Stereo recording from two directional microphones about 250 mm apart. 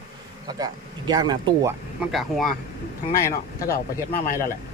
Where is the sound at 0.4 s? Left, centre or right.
Centre.